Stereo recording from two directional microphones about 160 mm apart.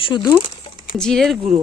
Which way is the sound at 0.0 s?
25° left (ahead or behind).